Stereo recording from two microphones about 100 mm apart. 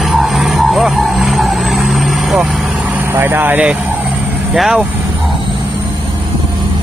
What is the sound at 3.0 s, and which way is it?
Speech, 20° right (ahead or behind).